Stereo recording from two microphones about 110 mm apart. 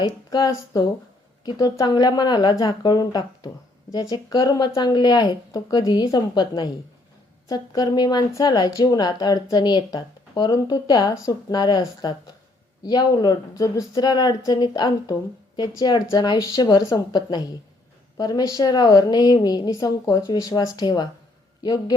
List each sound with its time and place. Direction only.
0.0 s a woman's voice: 35° left (ahead or behind)